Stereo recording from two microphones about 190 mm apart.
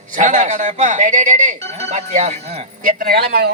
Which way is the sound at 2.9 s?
50° right (ahead or behind).